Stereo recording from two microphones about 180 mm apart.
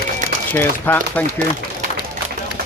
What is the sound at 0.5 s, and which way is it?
Speech, 10° left (ahead or behind).